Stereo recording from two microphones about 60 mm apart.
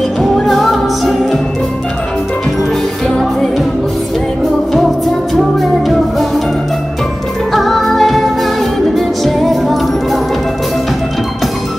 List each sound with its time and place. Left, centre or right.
0.5 s music: centre
3.1 s music: centre
5.3 s music: centre
7.5 s music: centre